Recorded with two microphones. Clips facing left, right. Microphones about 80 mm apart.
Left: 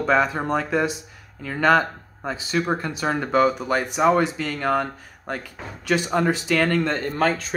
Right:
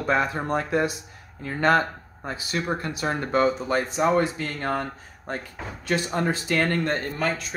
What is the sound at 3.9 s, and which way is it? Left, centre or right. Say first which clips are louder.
Speech: left 4 dB; left.